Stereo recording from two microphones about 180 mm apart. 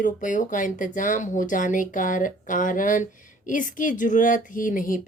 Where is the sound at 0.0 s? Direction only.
45° left (ahead or behind).